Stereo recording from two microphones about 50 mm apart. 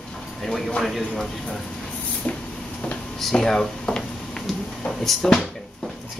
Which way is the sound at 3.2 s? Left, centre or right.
Centre.